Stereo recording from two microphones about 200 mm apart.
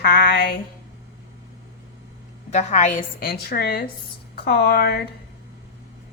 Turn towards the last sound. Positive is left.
turn(degrees=50)  # may be behind; listen again after turning